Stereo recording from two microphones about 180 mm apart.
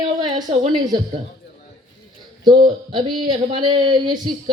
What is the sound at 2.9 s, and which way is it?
A man's voice, 25° right (ahead or behind).